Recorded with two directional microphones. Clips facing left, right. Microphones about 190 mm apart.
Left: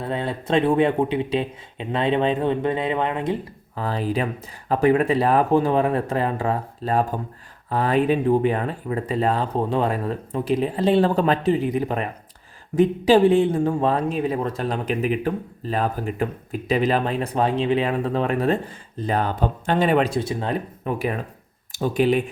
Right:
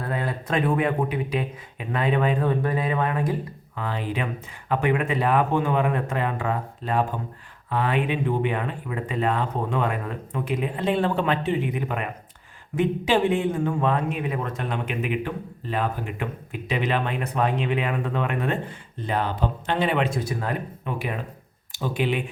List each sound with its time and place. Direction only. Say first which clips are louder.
0.0 s speech: left 2 dB; 25° left (ahead or behind)
3.8 s speech: left 4 dB; 35° left (ahead or behind)
20.8 s speech: left 6 dB; 45° left (ahead or behind)